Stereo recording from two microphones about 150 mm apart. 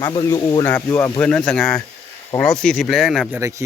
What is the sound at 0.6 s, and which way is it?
Speech, 15° left (ahead or behind).